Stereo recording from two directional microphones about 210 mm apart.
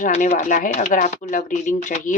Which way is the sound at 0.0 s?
40° left (ahead or behind).